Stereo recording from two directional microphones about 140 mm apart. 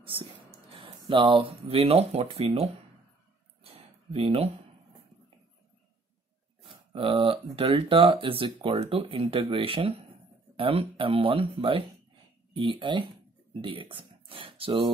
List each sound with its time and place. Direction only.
0.0 s speech: 40° right (ahead or behind)
3.6 s a sound: 45° right (ahead or behind)
6.9 s speech: 40° right (ahead or behind)